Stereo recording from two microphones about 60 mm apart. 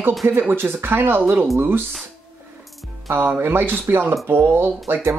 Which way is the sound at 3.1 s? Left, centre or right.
Right.